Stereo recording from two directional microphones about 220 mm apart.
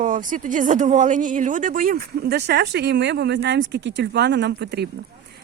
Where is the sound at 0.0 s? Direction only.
35° right (ahead or behind).